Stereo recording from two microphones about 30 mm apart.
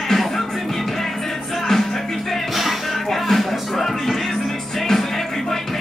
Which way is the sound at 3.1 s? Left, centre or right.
Centre.